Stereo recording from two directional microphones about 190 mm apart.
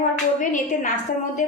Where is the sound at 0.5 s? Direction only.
40° left (ahead or behind).